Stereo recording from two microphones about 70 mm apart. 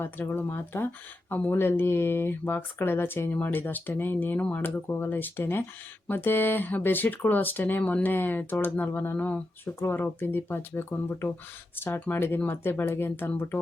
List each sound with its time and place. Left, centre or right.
0.0 s speech: left